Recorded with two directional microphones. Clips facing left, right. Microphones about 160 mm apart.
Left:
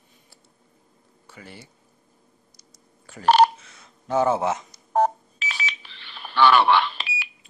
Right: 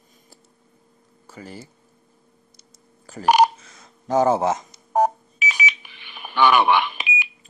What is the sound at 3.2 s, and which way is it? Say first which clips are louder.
Telephone dialing: even; 15° right (ahead or behind).